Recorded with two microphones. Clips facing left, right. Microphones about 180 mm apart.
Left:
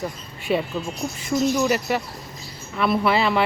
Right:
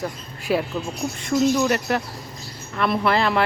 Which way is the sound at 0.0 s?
Centre (ahead or behind).